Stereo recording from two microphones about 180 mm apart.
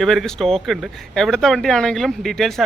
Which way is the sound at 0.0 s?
Centre (ahead or behind).